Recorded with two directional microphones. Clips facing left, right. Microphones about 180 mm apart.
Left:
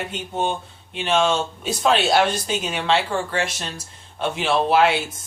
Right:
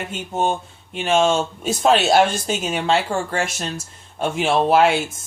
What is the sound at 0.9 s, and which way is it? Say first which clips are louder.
Speech: right 2 dB; 45° right (ahead or behind).